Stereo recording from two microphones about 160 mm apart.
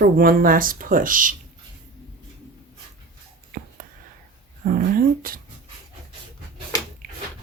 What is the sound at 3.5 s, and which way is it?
Whispering, 70° right (ahead or behind).